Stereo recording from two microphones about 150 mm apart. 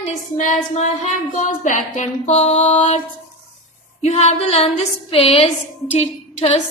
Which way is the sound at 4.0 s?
50° left (ahead or behind).